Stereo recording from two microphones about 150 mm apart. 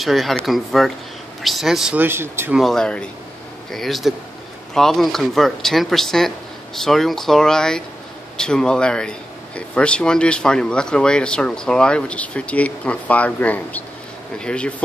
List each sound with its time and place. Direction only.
0.0 s speech: centre (ahead or behind)
2.0 s speech: 15° right (ahead or behind)
2.5 s speech: centre (ahead or behind)